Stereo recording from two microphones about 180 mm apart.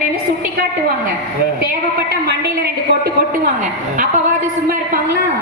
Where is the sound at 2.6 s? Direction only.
60° right (ahead or behind).